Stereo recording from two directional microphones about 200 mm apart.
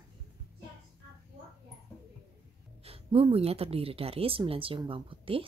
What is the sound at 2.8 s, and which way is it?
Speech, 30° right (ahead or behind).